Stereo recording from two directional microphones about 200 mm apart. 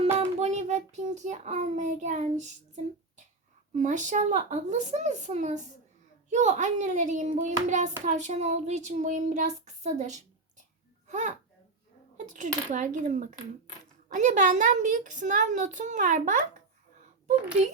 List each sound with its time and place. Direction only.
0.2 s child singing: 35° right (ahead or behind)
3.8 s a woman's voice: 40° right (ahead or behind)